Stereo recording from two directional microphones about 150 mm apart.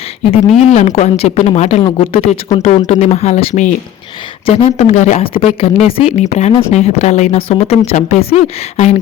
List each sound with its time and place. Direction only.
0.7 s speech: 50° left (ahead or behind)
5.2 s speech: 40° left (ahead or behind)